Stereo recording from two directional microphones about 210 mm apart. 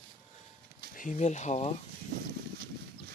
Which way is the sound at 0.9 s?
35° left (ahead or behind).